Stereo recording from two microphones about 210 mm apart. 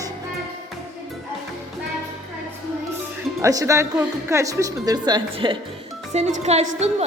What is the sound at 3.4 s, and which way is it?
A woman's voice, 15° right (ahead or behind).